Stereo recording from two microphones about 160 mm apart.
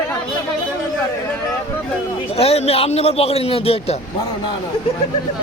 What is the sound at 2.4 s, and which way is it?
A man's voice, 40° left (ahead or behind).